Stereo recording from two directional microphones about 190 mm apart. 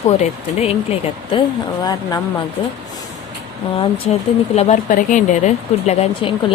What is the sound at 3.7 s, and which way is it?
Speech, 35° left (ahead or behind).